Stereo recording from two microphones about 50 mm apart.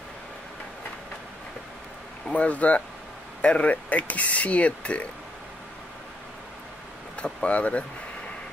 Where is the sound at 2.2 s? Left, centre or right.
Left.